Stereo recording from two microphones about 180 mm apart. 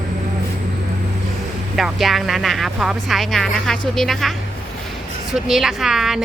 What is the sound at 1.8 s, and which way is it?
A woman's voice, centre (ahead or behind).